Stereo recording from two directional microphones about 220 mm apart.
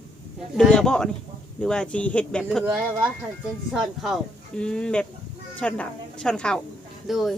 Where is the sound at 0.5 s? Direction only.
5° left (ahead or behind).